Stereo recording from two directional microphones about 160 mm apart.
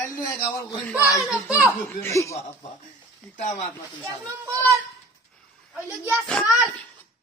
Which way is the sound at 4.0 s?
15° right (ahead or behind).